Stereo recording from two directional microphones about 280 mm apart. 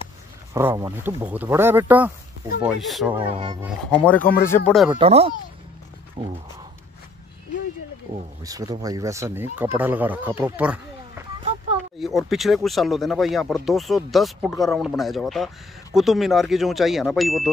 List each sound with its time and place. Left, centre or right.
0.5 s speech: centre
3.3 s speech: centre
4.0 s speech: centre
4.9 s speech: right
8.5 s speech: centre